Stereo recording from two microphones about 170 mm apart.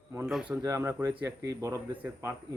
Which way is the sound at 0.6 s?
15° right (ahead or behind).